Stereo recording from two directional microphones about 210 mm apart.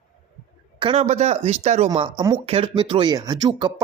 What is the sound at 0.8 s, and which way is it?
Speech, 30° right (ahead or behind).